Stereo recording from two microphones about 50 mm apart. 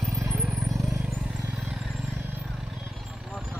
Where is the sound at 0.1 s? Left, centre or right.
Right.